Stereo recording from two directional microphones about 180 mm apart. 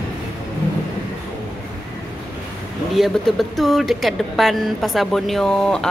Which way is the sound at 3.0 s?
Centre (ahead or behind).